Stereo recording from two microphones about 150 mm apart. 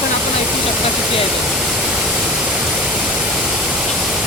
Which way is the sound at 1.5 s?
5° right (ahead or behind).